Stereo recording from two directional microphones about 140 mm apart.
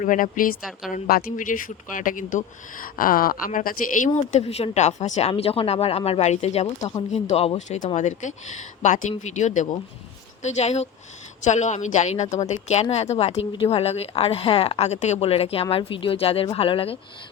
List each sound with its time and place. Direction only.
0.0 s speech: 70° left (ahead or behind)
2.8 s a woman's voice: 90° left; by 5.3 s 55° left (ahead or behind)
5.3 s a woman's voice: 45° left (ahead or behind)
7.9 s a woman's voice: 60° left (ahead or behind); by 17.0 s 40° left (ahead or behind)